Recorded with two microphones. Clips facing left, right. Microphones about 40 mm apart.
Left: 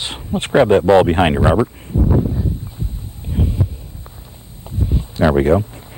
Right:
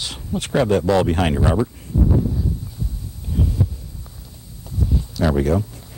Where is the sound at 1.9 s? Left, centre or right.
Left.